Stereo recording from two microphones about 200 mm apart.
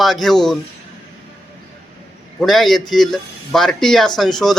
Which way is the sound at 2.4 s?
Centre (ahead or behind).